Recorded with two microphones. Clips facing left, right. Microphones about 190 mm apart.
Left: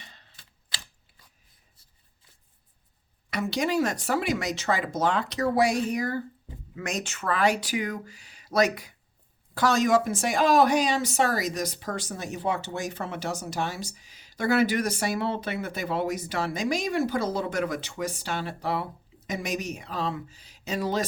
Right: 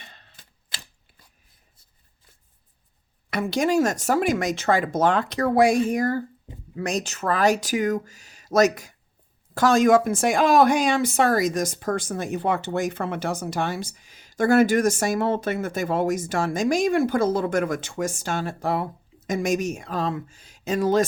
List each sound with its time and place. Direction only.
0.1 s typewriter: 50° right (ahead or behind)
3.2 s speech: 55° right (ahead or behind)
6.7 s speech: 35° right (ahead or behind)